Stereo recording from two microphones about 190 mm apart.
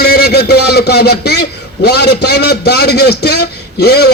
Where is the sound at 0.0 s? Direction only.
55° left (ahead or behind).